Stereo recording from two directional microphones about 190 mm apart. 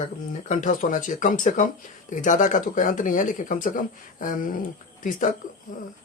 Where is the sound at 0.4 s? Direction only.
40° left (ahead or behind).